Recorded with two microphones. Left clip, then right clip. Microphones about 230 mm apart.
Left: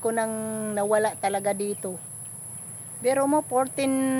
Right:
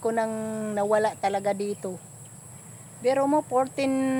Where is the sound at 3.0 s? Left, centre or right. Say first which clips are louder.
Even; centre.